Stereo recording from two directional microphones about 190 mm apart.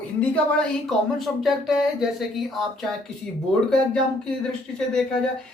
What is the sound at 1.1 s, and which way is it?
A woman's voice, centre (ahead or behind).